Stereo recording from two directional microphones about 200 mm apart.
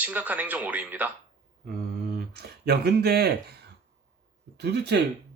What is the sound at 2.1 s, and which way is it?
Speech, 50° right (ahead or behind).